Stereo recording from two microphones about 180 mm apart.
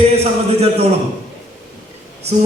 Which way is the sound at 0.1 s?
35° right (ahead or behind).